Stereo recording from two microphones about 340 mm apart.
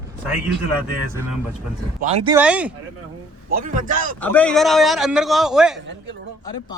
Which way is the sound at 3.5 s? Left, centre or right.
Right.